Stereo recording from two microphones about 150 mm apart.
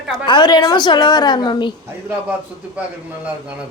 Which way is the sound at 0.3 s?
30° left (ahead or behind).